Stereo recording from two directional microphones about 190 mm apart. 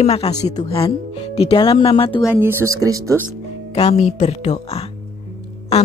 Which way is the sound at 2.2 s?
10° right (ahead or behind).